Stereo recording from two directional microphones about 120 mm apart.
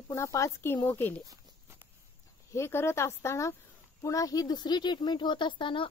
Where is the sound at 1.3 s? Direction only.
20° right (ahead or behind).